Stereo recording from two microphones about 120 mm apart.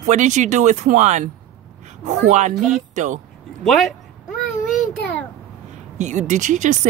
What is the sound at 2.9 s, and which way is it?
Speech, 90° right.